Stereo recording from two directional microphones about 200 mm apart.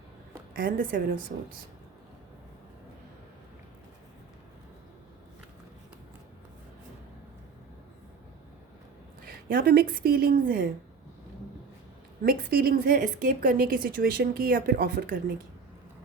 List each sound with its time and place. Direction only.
0.5 s a woman's voice: 45° right (ahead or behind)
9.2 s a woman's voice: 45° right (ahead or behind)
12.2 s a woman's voice: 50° right (ahead or behind)